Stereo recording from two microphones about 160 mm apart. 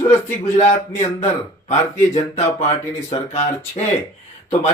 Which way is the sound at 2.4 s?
20° left (ahead or behind).